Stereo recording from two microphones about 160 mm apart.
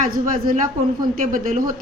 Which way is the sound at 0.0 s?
55° right (ahead or behind).